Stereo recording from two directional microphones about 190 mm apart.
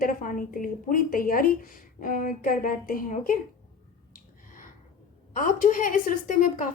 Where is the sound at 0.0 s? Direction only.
45° left (ahead or behind).